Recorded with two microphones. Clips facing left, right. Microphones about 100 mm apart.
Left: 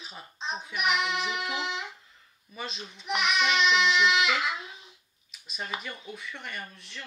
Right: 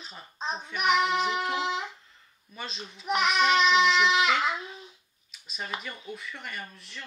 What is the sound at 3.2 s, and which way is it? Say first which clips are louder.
A child's voice: right 3 dB; 40° right (ahead or behind).